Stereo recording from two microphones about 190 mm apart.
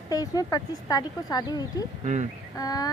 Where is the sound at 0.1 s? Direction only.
20° left (ahead or behind).